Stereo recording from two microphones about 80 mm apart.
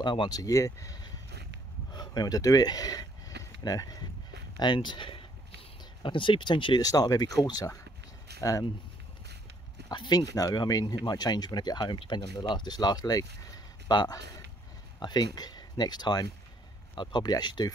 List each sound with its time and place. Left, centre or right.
0.0 s speech: left
0.4 s speech: left
2.0 s speech: left
4.6 s speech: left
6.8 s speech: left
9.9 s speech: left
16.9 s speech: left